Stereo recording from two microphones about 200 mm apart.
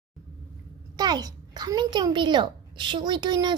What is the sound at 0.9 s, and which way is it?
A child's voice, 20° right (ahead or behind).